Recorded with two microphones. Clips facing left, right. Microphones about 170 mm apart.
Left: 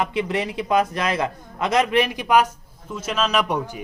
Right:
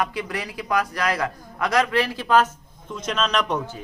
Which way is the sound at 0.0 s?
25° left (ahead or behind).